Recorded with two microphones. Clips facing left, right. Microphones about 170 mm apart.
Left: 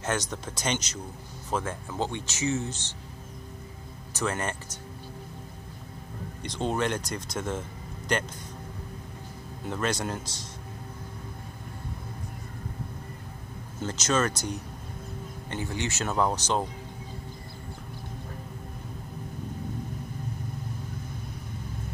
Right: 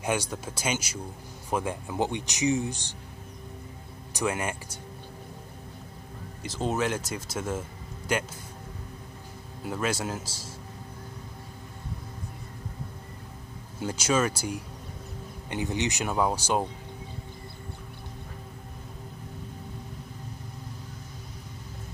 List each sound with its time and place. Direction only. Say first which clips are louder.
0.0 s speech: right 1 dB; 10° right (ahead or behind)
4.1 s speech: right 1 dB; 10° right (ahead or behind)
6.4 s speech: even; 5° right (ahead or behind)
9.7 s speech: even; 5° right (ahead or behind)
13.7 s speech: right 1 dB; 10° right (ahead or behind)